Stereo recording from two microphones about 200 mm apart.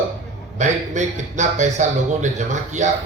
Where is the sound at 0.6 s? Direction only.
35° right (ahead or behind).